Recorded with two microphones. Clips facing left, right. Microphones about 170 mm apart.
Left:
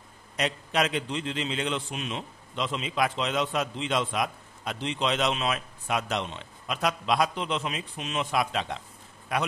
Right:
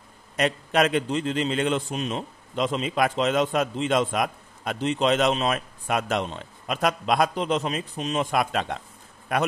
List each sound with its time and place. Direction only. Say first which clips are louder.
0.4 s a man's voice: right 5 dB; 50° right (ahead or behind)